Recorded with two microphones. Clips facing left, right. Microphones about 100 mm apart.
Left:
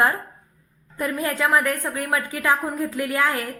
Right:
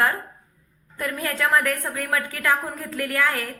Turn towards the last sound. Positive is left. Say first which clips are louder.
# left 1 dB
turn(degrees=20)  # may be behind; listen again after turning